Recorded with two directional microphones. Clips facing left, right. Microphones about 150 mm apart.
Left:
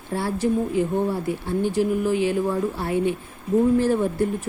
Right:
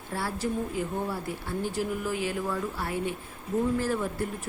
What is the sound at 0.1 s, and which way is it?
A woman's voice, 25° left (ahead or behind).